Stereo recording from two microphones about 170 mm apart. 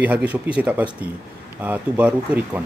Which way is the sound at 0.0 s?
10° right (ahead or behind).